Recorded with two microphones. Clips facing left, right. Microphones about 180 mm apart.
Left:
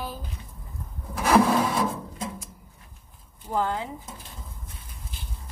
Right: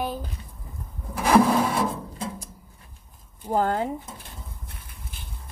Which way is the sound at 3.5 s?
45° right (ahead or behind).